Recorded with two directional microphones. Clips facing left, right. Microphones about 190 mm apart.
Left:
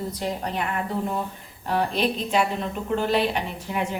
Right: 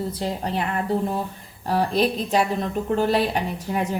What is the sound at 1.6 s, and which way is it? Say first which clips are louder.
Speech: right 3 dB; 40° right (ahead or behind).